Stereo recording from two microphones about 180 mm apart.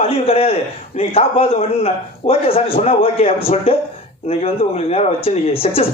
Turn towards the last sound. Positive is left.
turn(degrees=30)  # may be behind; listen again after turning